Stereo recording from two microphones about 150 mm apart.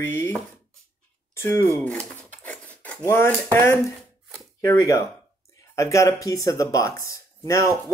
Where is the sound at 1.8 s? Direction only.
10° left (ahead or behind).